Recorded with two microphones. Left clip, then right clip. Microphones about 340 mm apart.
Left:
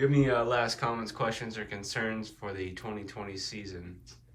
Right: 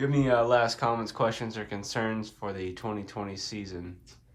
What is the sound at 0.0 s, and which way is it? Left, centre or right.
Speech, centre.